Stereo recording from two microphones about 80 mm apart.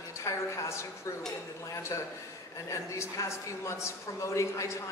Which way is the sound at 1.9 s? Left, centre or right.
Left.